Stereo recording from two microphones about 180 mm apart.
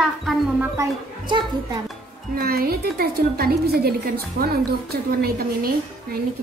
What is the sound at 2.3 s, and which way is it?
Speech, 55° right (ahead or behind).